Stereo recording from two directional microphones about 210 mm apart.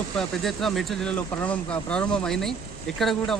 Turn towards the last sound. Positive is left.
turn(degrees=0)  # may be behind; listen again after turning